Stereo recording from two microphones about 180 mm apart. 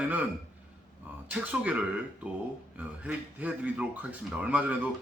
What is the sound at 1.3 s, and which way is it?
Speech, 10° right (ahead or behind).